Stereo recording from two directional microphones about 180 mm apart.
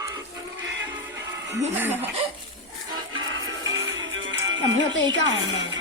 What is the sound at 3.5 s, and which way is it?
Music, 90° right.